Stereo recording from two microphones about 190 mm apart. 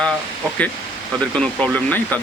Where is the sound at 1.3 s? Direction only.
5° left (ahead or behind).